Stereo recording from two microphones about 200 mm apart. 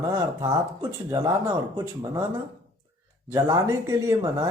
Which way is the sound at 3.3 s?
15° right (ahead or behind).